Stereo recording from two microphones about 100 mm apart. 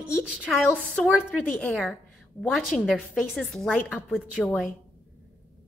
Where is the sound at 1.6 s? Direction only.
Centre (ahead or behind).